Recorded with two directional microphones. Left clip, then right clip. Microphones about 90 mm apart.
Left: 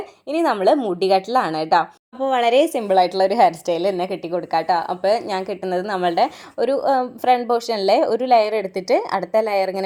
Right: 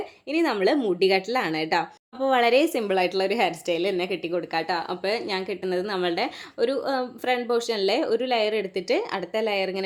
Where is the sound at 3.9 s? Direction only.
40° left (ahead or behind).